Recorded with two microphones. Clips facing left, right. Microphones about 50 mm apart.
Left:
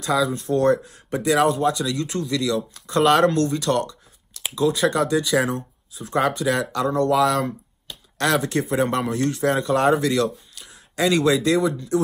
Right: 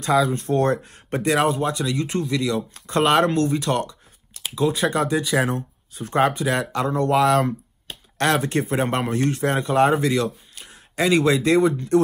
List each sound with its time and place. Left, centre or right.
0.0 s speech: right
1.3 s a man's voice: right
2.7 s speech: right
3.1 s a man's voice: centre
7.4 s computer keyboard: right
8.4 s a man's voice: right
10.6 s a sound: right
11.1 s a man's voice: right